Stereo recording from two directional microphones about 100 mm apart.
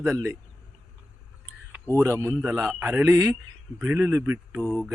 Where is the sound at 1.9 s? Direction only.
30° right (ahead or behind).